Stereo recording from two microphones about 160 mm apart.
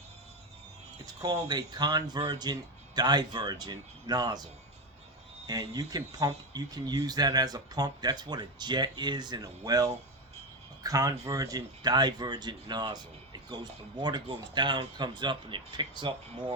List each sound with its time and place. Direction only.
1.0 s speech: 25° right (ahead or behind)
5.5 s speech: 25° right (ahead or behind)